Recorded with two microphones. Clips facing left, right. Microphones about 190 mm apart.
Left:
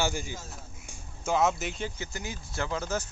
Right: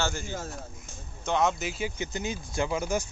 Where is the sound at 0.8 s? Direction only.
5° left (ahead or behind).